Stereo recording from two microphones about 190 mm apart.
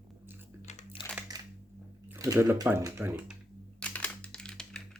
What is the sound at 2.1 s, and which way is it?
Speech, 15° right (ahead or behind).